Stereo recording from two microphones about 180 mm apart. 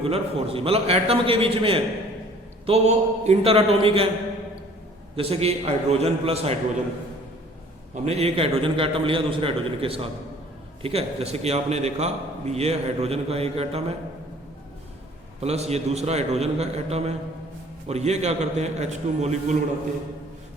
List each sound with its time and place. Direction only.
0.0 s a man's voice: 35° right (ahead or behind)
5.1 s a man's voice: 35° right (ahead or behind)
8.0 s a man's voice: 35° right (ahead or behind)
15.4 s a man's voice: 35° right (ahead or behind)